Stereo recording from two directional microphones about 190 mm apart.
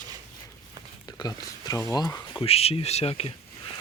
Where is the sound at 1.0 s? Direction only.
20° left (ahead or behind).